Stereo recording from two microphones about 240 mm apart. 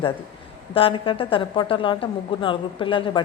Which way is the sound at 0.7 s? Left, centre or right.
Left.